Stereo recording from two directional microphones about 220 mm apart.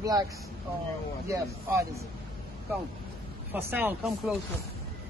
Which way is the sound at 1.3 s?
15° right (ahead or behind).